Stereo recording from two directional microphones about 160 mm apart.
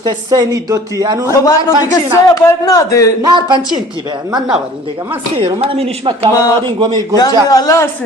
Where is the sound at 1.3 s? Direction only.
20° left (ahead or behind).